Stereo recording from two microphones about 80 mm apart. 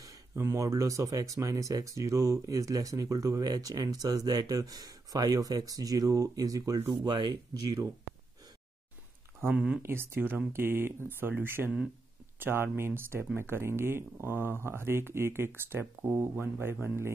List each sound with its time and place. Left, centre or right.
0.4 s speech: right
7.1 s speech: right
9.5 s speech: centre
9.8 s speech: right